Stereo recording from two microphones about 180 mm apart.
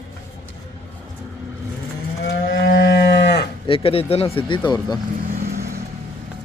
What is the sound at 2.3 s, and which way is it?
Moo, 55° left (ahead or behind).